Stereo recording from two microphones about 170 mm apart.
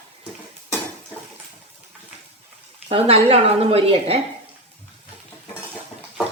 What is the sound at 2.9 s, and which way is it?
Speech, 35° right (ahead or behind).